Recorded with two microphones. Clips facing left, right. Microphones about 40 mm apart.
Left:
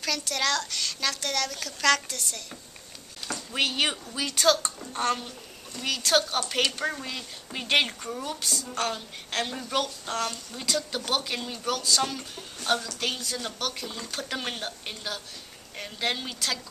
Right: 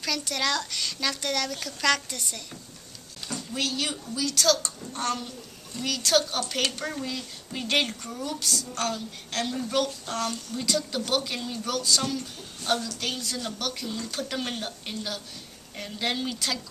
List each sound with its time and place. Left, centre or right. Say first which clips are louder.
0.0 s speech: even; centre
3.3 s speech: left 2 dB; left
4.4 s a woman's voice: left 2 dB; centre